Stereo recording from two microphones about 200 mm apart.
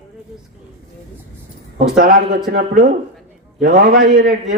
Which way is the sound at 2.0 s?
45° right (ahead or behind).